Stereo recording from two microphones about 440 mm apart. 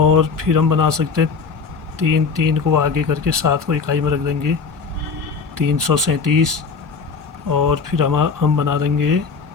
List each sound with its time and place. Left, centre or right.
0.0 s speech: right
5.6 s speech: right
7.5 s speech: right